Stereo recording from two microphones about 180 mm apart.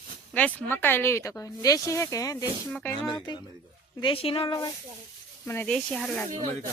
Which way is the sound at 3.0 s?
25° left (ahead or behind).